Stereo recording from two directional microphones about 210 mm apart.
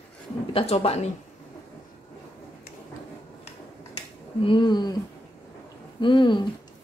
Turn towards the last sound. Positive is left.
turn(degrees=20)  # may be behind; listen again after turning